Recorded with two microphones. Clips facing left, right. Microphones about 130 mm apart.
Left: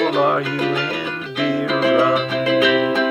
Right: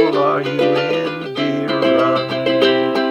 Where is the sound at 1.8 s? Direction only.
30° right (ahead or behind).